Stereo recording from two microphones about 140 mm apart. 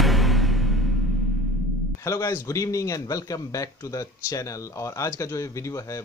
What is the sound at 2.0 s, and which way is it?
Speech, 20° left (ahead or behind).